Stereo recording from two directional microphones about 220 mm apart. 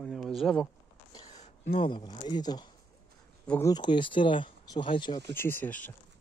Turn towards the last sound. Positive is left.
turn(degrees=10)  # may be behind; listen again after turning